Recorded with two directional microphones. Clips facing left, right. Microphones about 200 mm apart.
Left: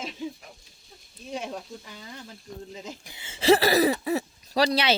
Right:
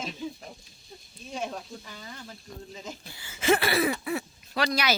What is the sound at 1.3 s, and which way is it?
Speech, 15° left (ahead or behind).